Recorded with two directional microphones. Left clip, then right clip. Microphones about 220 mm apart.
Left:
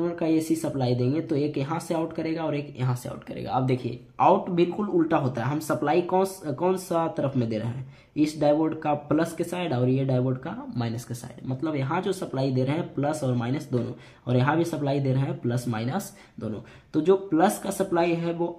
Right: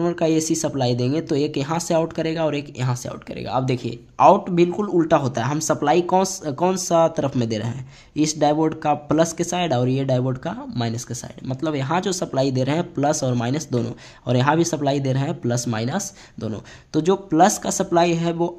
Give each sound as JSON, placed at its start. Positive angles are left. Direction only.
{"t": 0.0, "sound": "speech", "side_deg": -45}